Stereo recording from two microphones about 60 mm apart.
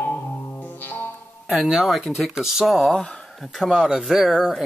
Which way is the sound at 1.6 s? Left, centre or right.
Centre.